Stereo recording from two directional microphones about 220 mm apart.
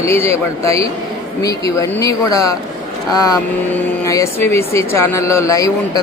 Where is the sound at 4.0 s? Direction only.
15° left (ahead or behind).